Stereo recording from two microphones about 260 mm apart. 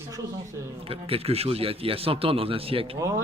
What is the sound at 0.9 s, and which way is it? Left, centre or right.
A man's voice, right.